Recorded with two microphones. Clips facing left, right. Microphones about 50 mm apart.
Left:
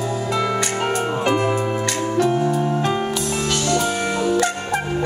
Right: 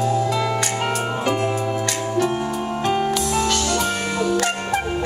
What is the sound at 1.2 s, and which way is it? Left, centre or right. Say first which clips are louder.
Music: left 3 dB; left.